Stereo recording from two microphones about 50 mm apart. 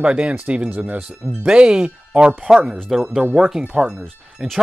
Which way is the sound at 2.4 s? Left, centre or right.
Centre.